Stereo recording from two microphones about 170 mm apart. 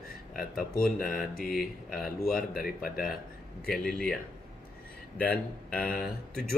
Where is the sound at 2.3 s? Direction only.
60° left (ahead or behind).